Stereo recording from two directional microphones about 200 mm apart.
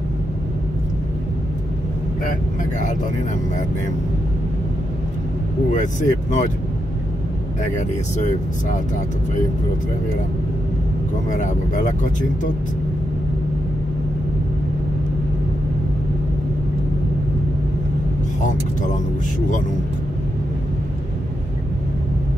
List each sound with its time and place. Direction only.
5.7 s speech: 40° left (ahead or behind)
7.7 s speech: 35° left (ahead or behind)
11.2 s speech: 40° left (ahead or behind)
18.4 s speech: 40° left (ahead or behind)